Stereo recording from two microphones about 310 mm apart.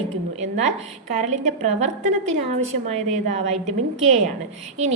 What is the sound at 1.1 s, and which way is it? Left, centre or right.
Speech, right.